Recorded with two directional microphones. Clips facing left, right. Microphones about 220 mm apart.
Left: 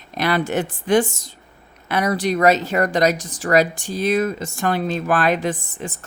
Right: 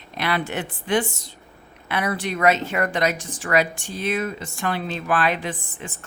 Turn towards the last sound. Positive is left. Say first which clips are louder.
# left 6 dB
turn(degrees=40)  # may be behind; listen again after turning